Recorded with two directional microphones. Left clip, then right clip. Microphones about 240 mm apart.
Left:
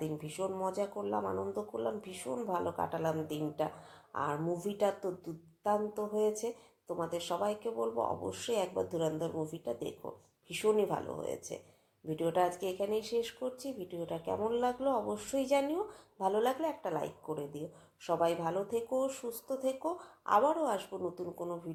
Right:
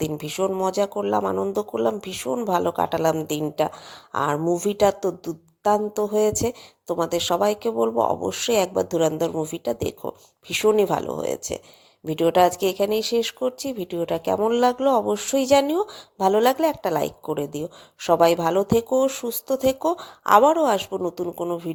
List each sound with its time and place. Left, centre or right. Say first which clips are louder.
0.0 s a woman's voice: right 13 dB; right